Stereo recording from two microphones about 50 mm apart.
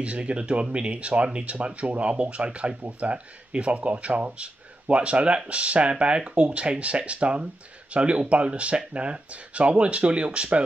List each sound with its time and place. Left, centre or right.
0.0 s speech: right